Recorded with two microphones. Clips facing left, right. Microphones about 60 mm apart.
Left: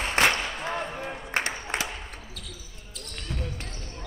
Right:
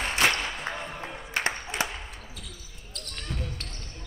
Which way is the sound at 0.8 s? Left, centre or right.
Left.